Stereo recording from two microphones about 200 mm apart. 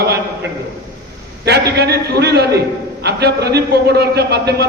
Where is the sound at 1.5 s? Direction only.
55° right (ahead or behind).